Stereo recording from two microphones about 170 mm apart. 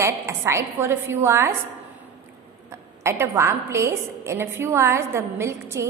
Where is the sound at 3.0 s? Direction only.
15° right (ahead or behind).